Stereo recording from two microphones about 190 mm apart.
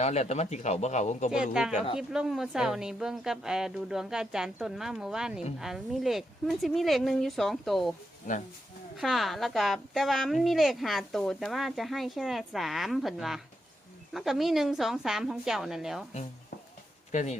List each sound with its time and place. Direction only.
0.0 s speech: 35° left (ahead or behind)
2.0 s a woman's voice: 5° right (ahead or behind)
9.0 s a woman's voice: centre (ahead or behind)
17.1 s speech: 40° left (ahead or behind)